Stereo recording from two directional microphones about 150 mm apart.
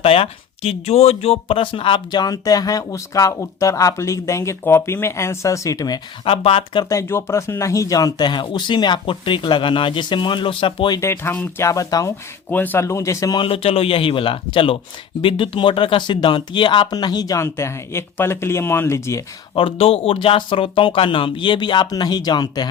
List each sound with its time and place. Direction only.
0.0 s speech: 40° left (ahead or behind)
6.2 s speech: 35° left (ahead or behind)
6.8 s speech: 20° left (ahead or behind)
11.0 s speech: 15° left (ahead or behind)
12.5 s speech: 10° left (ahead or behind)
13.4 s speech: 40° left (ahead or behind); by 19.2 s 20° left (ahead or behind)
19.5 s speech: 35° left (ahead or behind)